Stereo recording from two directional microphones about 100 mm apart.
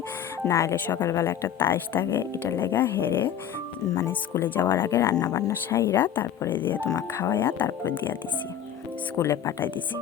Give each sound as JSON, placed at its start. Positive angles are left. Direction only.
{"t": 0.4, "sound": "speech", "side_deg": 30}
{"t": 5.2, "sound": "speech", "side_deg": 35}
{"t": 5.6, "sound": "speech", "side_deg": 25}
{"t": 9.1, "sound": "speech", "side_deg": 30}